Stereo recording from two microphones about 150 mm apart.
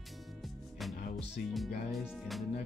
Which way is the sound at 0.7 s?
Centre (ahead or behind).